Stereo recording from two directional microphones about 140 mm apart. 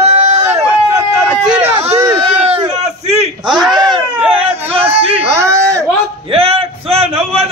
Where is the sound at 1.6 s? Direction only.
50° right (ahead or behind).